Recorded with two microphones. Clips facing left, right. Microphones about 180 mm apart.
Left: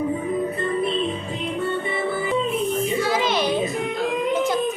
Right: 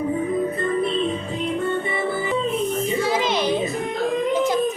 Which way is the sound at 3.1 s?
30° right (ahead or behind).